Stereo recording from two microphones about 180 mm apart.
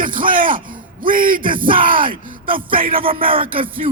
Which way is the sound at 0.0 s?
50° right (ahead or behind).